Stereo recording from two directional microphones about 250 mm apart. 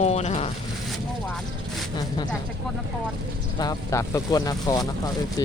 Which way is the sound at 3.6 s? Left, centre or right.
Centre.